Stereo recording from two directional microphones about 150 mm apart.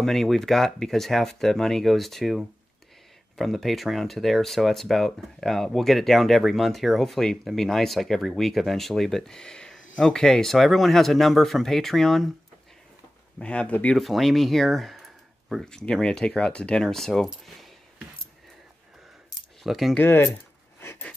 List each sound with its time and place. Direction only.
0.0 s speech: centre (ahead or behind)
13.4 s speech: 5° left (ahead or behind)
19.6 s speech: centre (ahead or behind)
20.0 s speech: 15° left (ahead or behind)
20.8 s a sound: 15° left (ahead or behind)